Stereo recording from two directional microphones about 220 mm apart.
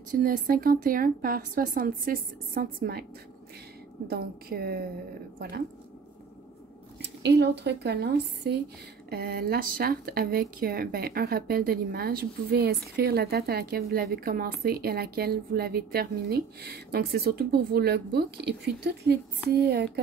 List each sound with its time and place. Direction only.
0.2 s speech: 40° right (ahead or behind)
4.1 s speech: 45° right (ahead or behind)
7.0 s speech: 50° right (ahead or behind)